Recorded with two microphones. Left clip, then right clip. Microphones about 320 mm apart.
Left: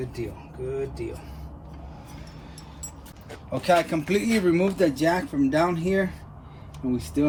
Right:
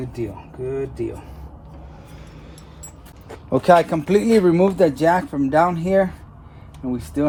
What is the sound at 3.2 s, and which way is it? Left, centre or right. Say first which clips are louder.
Speech: right 8 dB; centre.